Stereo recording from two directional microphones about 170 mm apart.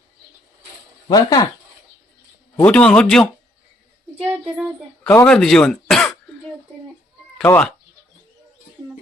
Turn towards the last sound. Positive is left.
turn(degrees=10)  # may be behind; listen again after turning